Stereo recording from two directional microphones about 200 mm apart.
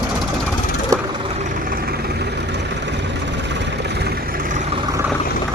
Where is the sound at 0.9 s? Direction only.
15° right (ahead or behind).